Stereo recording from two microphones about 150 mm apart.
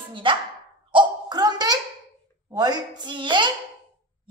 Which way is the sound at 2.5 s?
25° right (ahead or behind).